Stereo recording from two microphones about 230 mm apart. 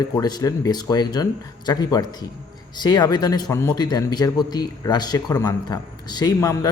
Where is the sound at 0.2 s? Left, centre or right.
Centre.